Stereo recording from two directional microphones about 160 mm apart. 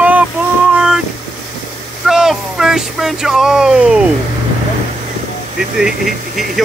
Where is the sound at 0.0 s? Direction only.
10° right (ahead or behind).